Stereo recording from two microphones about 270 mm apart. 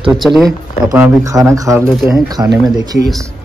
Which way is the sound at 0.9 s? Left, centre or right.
Centre.